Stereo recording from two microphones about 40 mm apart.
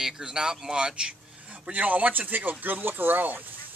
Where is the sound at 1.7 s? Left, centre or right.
Right.